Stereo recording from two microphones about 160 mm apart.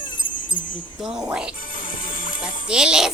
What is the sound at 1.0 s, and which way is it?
Speech, 5° right (ahead or behind).